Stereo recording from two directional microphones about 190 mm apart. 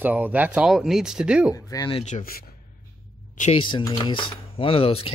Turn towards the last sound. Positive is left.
turn(degrees=30)  # may be behind; listen again after turning